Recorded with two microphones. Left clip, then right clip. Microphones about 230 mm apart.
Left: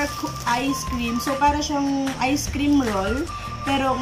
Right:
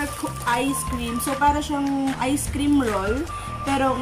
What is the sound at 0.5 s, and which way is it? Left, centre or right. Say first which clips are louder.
Speech: even; centre.